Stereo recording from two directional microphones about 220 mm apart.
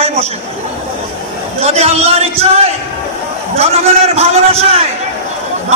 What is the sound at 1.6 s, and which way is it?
Speech, 30° right (ahead or behind).